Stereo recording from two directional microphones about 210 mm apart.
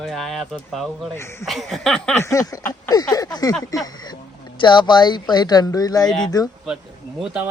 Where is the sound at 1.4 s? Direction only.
Centre (ahead or behind); by 4.2 s 20° left (ahead or behind).